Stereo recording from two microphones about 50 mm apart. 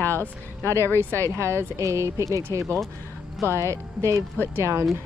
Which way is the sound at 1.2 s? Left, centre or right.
Right.